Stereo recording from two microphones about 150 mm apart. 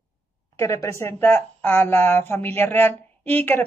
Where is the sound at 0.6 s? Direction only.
20° left (ahead or behind).